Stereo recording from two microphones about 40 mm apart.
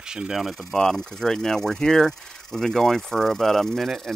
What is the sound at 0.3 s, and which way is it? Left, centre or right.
Speech, centre.